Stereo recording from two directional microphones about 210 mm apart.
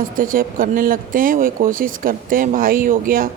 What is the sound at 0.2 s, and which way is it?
A woman's voice, 40° right (ahead or behind).